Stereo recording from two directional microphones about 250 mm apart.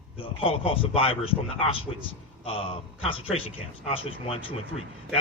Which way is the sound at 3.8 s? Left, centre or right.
Left.